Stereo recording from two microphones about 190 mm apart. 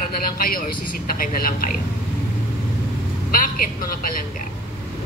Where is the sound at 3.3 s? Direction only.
50° left (ahead or behind).